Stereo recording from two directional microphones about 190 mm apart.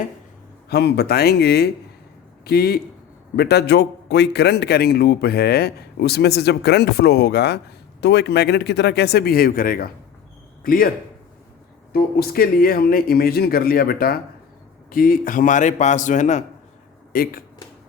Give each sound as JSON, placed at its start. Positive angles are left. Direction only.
{"t": 0.7, "sound": "a man's voice", "side_deg": 60}
{"t": 11.9, "sound": "a man's voice", "side_deg": 55}